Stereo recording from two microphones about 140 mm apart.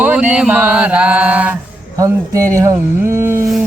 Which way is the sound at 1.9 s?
25° right (ahead or behind).